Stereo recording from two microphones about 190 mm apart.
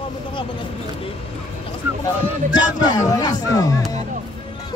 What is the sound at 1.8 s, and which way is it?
Speech, 10° right (ahead or behind).